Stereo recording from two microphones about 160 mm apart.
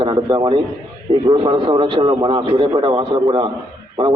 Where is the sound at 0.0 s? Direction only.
35° right (ahead or behind).